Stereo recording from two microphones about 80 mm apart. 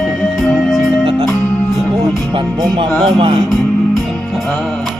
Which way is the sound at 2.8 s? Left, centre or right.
Right.